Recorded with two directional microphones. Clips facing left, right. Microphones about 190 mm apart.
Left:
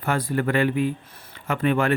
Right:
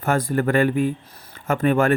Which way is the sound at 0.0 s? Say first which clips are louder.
Right 3 dB; 45° right (ahead or behind).